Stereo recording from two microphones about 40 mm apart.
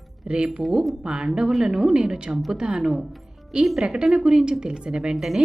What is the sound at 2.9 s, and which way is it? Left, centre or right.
A woman's voice, centre.